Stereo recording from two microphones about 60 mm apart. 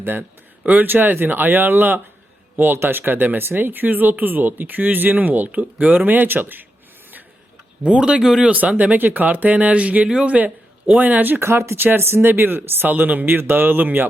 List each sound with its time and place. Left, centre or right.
0.0 s speech: right
7.9 s speech: centre
8.2 s speech: centre
8.4 s speech: right
10.3 s speech: right
11.3 s speech: right